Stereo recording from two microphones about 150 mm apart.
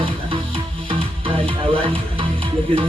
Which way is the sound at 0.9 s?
35° right (ahead or behind).